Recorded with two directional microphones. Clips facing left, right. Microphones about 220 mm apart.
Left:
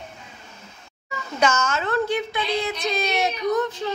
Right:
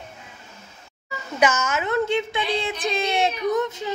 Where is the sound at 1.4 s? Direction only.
15° right (ahead or behind).